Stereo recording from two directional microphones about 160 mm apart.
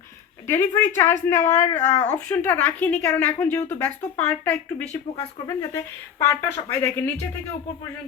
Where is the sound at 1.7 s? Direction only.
45° left (ahead or behind).